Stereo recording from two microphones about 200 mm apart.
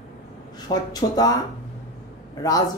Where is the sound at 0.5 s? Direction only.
20° left (ahead or behind).